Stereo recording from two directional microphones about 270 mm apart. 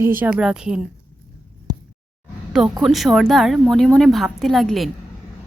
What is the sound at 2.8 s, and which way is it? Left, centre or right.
A woman's voice, centre.